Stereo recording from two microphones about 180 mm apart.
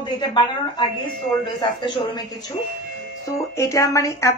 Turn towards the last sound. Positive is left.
turn(degrees=15)  # may be behind; listen again after turning